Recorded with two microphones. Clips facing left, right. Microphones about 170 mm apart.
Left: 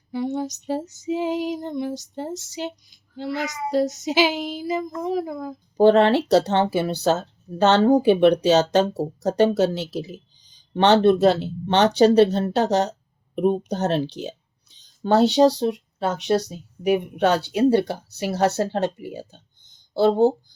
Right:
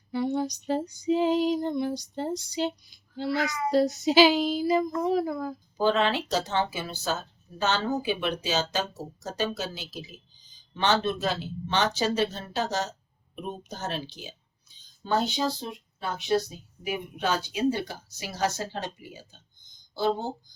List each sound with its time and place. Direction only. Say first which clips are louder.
0.1 s female singing: left 2 dB; 15° left (ahead or behind)
2.3 s child singing: right 1 dB; 20° left (ahead or behind)
5.0 s female singing: left 1 dB; 20° left (ahead or behind)
5.7 s speech: left 10 dB; 65° left (ahead or behind)